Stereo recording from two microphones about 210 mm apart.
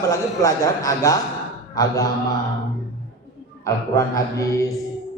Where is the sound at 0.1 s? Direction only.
15° left (ahead or behind).